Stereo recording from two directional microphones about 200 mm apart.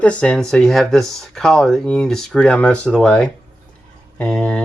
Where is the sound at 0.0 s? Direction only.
5° left (ahead or behind).